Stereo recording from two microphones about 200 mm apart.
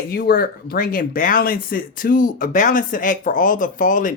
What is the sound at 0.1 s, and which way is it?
Speech, 50° left (ahead or behind).